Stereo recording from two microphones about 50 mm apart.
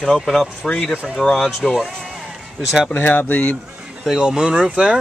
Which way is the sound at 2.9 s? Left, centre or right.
Left.